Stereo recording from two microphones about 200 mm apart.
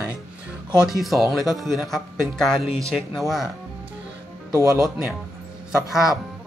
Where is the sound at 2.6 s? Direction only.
30° left (ahead or behind).